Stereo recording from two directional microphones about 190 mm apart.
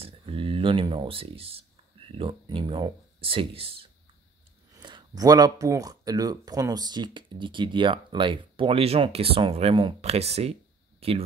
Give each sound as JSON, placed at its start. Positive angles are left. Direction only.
{"t": 0.0, "sound": "speech", "side_deg": -30}